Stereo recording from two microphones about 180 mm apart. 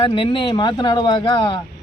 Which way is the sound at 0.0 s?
30° left (ahead or behind).